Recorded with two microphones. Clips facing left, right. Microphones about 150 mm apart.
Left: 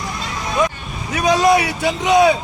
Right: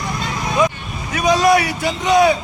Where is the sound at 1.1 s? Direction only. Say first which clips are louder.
Even; 25° left (ahead or behind).